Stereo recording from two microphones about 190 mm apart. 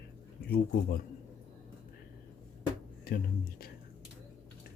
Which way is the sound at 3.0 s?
50° left (ahead or behind).